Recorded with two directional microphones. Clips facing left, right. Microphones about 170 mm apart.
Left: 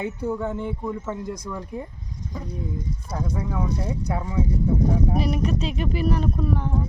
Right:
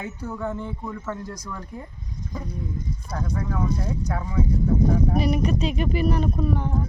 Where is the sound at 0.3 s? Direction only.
15° left (ahead or behind).